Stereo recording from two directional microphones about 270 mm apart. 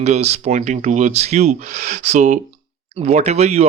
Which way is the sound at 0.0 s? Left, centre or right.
Right.